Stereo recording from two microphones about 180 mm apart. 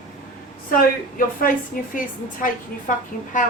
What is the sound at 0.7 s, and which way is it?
A woman's voice, 50° left (ahead or behind).